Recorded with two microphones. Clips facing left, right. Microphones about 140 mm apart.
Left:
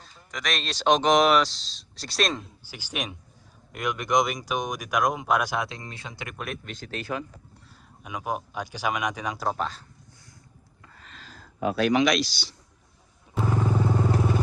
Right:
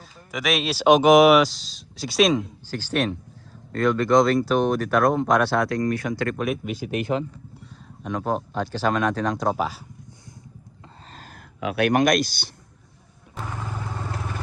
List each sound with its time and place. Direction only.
0.0 s speech: 5° right (ahead or behind)
2.6 s speech: 10° left (ahead or behind)
6.3 s speech: centre (ahead or behind); by 7.3 s 20° right (ahead or behind)
8.0 s speech: 10° left (ahead or behind)
9.6 s speech: 5° right (ahead or behind)
11.0 s a sound: 40° right (ahead or behind)
11.3 s speech: 70° right (ahead or behind); by 12.5 s 50° right (ahead or behind)
13.5 s vehicle: 20° left (ahead or behind)